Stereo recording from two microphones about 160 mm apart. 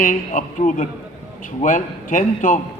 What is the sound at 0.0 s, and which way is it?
A man's voice, 55° left (ahead or behind).